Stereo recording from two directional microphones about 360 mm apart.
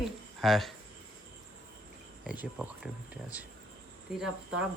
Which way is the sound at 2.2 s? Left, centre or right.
Centre.